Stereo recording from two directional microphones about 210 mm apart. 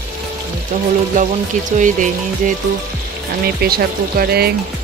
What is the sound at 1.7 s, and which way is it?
Speech, 35° right (ahead or behind).